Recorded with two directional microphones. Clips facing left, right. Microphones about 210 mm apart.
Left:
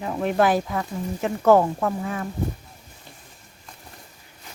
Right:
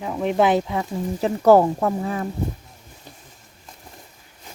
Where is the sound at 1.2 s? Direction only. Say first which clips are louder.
Right 3 dB; 35° right (ahead or behind).